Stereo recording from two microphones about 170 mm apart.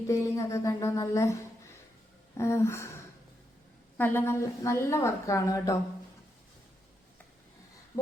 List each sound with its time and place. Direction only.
0.1 s a woman's voice: 20° left (ahead or behind)
3.9 s a woman's voice: 10° left (ahead or behind)